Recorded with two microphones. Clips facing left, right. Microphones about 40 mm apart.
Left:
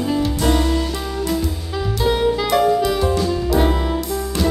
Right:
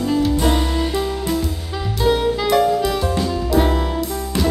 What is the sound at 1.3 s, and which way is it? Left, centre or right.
Music, centre.